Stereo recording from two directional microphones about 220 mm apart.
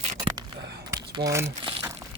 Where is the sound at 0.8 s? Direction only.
15° right (ahead or behind).